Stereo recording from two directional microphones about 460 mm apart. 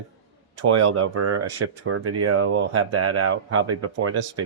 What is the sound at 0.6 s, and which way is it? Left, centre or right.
Speech, right.